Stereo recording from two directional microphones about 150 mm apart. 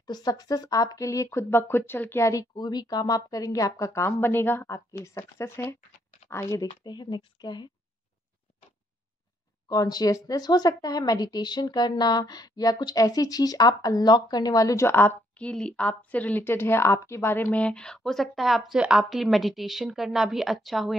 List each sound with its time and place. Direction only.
0.0 s speech: 25° left (ahead or behind)
9.7 s speech: 25° left (ahead or behind); by 20.9 s centre (ahead or behind)